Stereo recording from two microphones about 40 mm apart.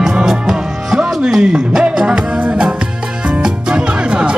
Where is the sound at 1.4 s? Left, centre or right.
Right.